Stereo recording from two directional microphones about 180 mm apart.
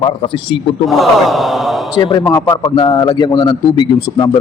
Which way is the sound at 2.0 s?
25° left (ahead or behind).